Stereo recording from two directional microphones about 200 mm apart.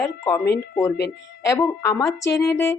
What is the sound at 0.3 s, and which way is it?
Speech, 10° left (ahead or behind).